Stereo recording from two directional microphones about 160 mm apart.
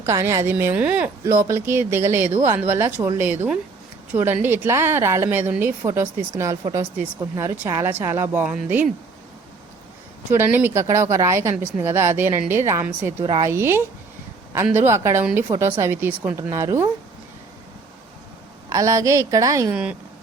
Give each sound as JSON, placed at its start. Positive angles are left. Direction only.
{"t": 0.0, "sound": "a woman's voice", "side_deg": -15}
{"t": 10.3, "sound": "a woman's voice", "side_deg": -15}
{"t": 13.2, "sound": "a woman's voice", "side_deg": -25}
{"t": 13.5, "sound": "a woman's voice", "side_deg": -15}
{"t": 18.7, "sound": "a woman's voice", "side_deg": -20}
{"t": 19.7, "sound": "a woman's voice", "side_deg": -10}